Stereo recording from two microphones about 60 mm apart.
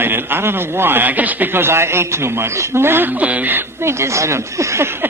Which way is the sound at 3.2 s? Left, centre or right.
Right.